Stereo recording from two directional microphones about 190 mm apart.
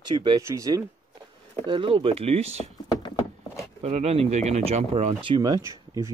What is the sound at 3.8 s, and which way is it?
Speech, 35° right (ahead or behind).